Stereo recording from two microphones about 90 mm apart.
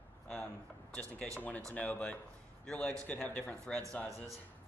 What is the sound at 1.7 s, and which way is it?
Speech, 15° left (ahead or behind).